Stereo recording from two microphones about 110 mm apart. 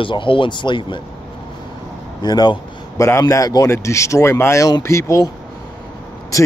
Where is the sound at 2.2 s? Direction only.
40° left (ahead or behind).